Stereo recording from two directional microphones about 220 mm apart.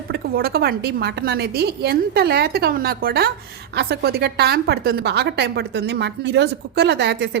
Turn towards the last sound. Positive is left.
turn(degrees=-50)  # may be behind; listen again after turning